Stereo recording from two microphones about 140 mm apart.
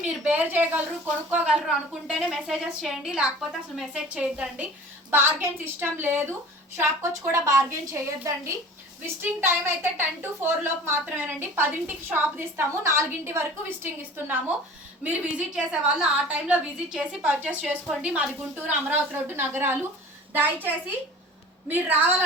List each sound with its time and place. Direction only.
0.1 s a woman's voice: 10° right (ahead or behind)
9.4 s a woman's voice: 15° right (ahead or behind)